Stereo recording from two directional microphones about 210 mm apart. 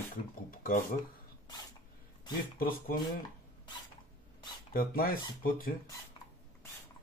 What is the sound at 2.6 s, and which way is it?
Speech, 45° left (ahead or behind).